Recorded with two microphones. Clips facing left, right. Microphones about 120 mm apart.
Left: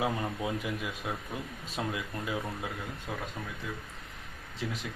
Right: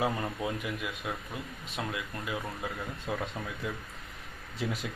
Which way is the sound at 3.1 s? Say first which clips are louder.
Right 5 dB; 5° right (ahead or behind).